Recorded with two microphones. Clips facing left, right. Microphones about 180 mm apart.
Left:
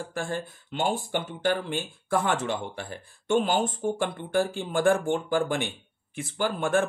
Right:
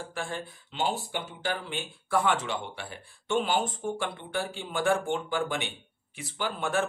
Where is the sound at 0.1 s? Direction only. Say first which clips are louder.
Left 4 dB; 45° left (ahead or behind).